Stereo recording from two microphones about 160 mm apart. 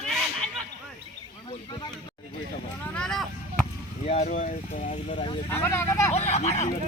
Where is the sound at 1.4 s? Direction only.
30° left (ahead or behind).